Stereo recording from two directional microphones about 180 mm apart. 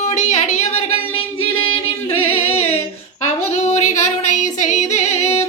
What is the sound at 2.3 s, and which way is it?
Singing, 35° left (ahead or behind).